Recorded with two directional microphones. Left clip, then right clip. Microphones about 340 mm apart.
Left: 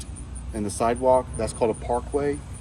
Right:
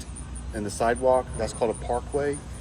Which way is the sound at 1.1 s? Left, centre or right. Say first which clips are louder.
Left 2 dB; left.